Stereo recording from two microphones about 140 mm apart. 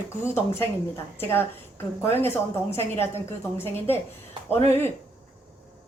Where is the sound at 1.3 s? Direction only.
20° left (ahead or behind).